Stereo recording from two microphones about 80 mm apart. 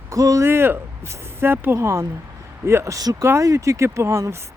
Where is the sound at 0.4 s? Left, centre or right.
Right.